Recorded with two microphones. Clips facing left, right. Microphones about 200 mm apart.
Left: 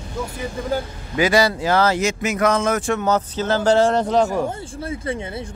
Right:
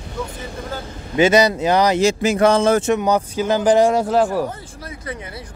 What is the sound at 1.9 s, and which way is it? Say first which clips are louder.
Speech: right 5 dB; 30° right (ahead or behind).